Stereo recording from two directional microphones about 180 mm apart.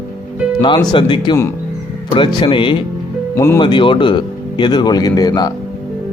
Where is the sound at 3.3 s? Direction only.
15° left (ahead or behind).